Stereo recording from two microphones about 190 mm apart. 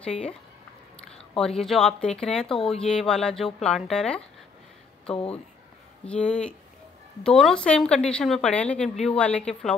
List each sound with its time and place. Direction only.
0.0 s a woman's voice: 5° left (ahead or behind)